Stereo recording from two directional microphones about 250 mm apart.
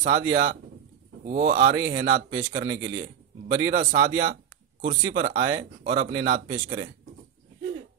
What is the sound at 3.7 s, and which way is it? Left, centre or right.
Speech, right.